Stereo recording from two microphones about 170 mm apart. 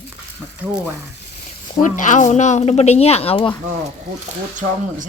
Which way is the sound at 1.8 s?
45° left (ahead or behind).